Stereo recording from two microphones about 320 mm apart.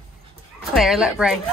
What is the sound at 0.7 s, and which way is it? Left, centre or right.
Speech, centre.